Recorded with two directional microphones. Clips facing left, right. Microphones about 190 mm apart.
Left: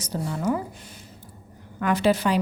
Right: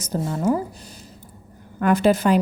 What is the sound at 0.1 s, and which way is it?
Speech, 40° right (ahead or behind).